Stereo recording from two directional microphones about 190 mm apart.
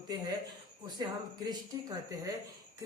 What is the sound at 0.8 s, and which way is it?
A woman's voice, 20° right (ahead or behind).